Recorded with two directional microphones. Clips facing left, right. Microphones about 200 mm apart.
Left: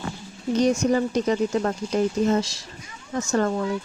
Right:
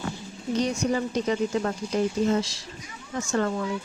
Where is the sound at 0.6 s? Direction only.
45° left (ahead or behind).